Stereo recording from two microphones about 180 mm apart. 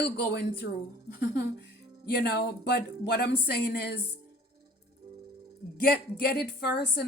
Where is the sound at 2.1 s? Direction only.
65° left (ahead or behind).